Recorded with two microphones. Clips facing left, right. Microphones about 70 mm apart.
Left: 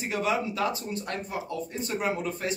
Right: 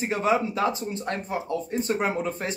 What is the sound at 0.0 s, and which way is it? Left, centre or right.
Speech, right.